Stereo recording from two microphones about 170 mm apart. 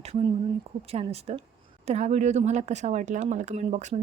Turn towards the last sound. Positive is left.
turn(degrees=-45)  # may be behind; listen again after turning